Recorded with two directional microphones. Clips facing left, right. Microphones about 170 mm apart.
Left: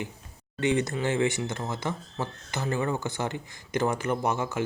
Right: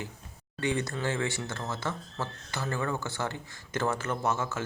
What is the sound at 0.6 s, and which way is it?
Speech, 20° left (ahead or behind).